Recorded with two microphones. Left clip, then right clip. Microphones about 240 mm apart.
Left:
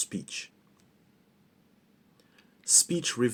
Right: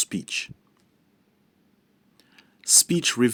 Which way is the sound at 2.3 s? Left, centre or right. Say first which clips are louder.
Right 5 dB; right.